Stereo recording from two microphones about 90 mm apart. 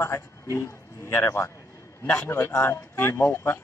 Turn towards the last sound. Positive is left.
turn(degrees=25)  # may be behind; listen again after turning